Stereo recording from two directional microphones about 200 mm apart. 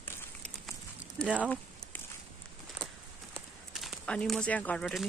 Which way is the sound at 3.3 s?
Centre (ahead or behind).